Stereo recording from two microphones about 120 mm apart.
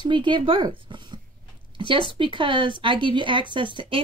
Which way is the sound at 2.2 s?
45° right (ahead or behind).